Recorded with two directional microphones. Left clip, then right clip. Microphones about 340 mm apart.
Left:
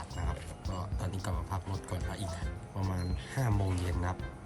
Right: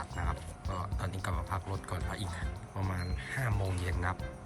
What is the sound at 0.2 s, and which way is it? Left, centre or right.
Music, centre.